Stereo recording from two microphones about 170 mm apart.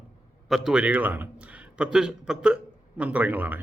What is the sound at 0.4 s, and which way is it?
A man's voice, centre (ahead or behind).